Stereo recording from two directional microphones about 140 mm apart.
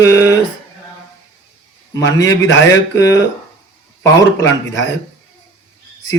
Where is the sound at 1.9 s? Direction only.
25° left (ahead or behind).